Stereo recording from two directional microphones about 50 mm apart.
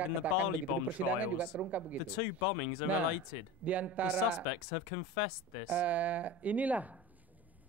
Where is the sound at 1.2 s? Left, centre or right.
Right.